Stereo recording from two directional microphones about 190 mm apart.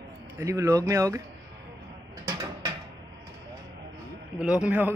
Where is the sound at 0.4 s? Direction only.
15° right (ahead or behind).